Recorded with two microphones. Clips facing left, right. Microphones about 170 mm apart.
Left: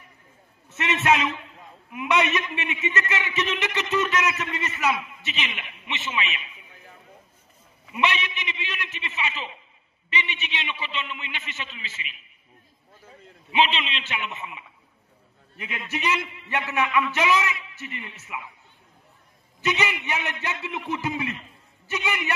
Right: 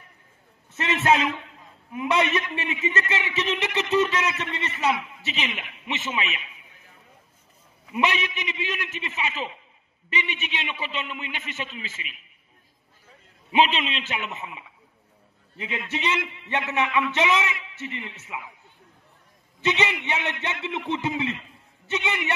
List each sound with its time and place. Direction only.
0.7 s a man's voice: 30° right (ahead or behind)
7.9 s a man's voice: 40° right (ahead or behind)
13.5 s a man's voice: 45° right (ahead or behind)
15.5 s a man's voice: 25° right (ahead or behind)
19.6 s a man's voice: 25° right (ahead or behind)